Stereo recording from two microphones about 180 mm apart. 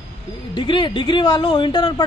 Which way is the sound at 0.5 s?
25° left (ahead or behind).